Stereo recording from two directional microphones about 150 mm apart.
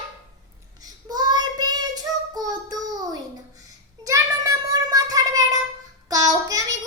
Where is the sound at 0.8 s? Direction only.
25° right (ahead or behind).